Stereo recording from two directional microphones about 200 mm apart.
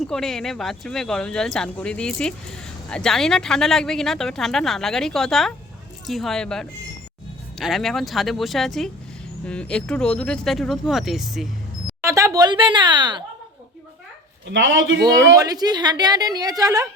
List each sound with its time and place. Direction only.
0.0 s speech: centre (ahead or behind)
12.0 s speech: 15° right (ahead or behind)
14.5 s a man's voice: 70° right (ahead or behind)
15.0 s a woman's voice: 20° right (ahead or behind)